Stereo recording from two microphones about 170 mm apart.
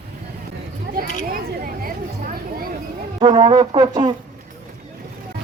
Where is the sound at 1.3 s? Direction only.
60° right (ahead or behind).